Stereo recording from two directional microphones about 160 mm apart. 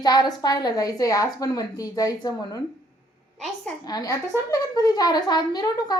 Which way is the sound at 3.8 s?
25° left (ahead or behind).